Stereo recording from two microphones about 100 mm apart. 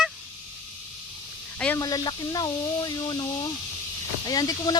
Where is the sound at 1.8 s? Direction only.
40° left (ahead or behind).